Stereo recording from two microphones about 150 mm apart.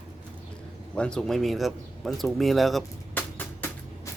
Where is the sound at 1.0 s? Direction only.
5° left (ahead or behind).